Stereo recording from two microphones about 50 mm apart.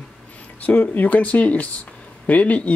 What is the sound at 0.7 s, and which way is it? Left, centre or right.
Speech, left.